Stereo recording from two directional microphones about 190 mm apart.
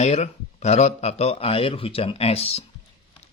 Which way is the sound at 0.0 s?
35° left (ahead or behind).